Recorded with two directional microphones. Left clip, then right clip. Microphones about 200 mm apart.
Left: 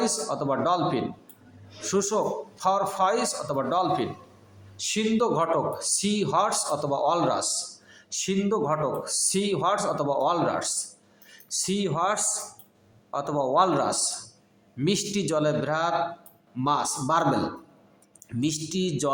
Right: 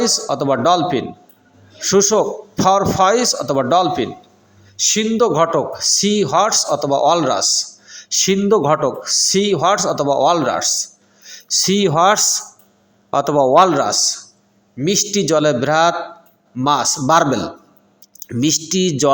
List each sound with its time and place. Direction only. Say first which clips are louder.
0.0 s speech: right 10 dB; 25° right (ahead or behind)